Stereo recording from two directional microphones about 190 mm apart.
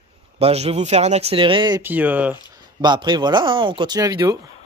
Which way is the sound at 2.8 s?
20° right (ahead or behind).